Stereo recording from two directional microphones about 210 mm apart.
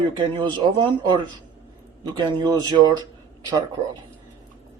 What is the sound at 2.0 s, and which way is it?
A man's voice, 20° right (ahead or behind).